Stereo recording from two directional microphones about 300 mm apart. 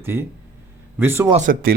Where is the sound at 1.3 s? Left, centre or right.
Right.